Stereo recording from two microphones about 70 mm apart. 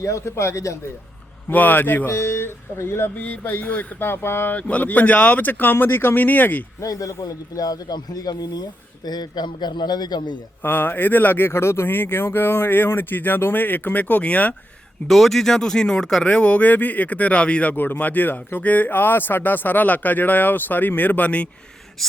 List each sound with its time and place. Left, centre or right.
0.0 s a man's voice: left
1.5 s speech: left
2.0 s speech: left
3.2 s speech: left
4.0 s speech: left
4.5 s speech: left
6.8 s a man's voice: left
7.6 s speech: left
9.0 s a man's voice: left
10.6 s speech: left
15.0 s speech: centre; by 21.4 s left